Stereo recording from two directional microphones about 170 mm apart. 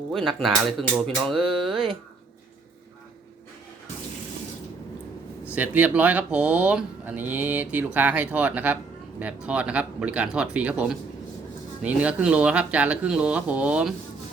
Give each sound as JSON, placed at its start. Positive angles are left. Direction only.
{"t": 0.1, "sound": "speech", "side_deg": 0}
{"t": 5.5, "sound": "speech", "side_deg": -10}